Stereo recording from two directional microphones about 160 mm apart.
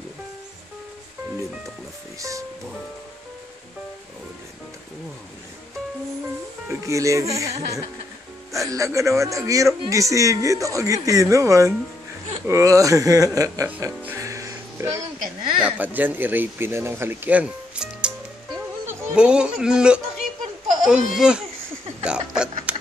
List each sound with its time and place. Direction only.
2.1 s a man's voice: 20° right (ahead or behind)
6.7 s a man's voice: 20° right (ahead or behind)
8.5 s a man's voice: 20° right (ahead or behind)
13.7 s music: 10° right (ahead or behind)
15.6 s speech: 10° right (ahead or behind)
22.0 s a sound: 5° right (ahead or behind)